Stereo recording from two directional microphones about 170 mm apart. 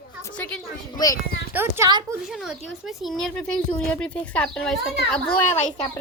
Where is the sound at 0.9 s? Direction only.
20° left (ahead or behind).